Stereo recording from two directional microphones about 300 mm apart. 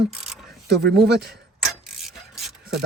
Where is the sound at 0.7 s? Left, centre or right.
Right.